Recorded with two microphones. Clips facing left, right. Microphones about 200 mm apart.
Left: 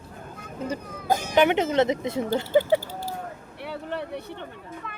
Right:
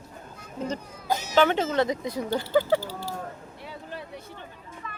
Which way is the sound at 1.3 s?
20° left (ahead or behind).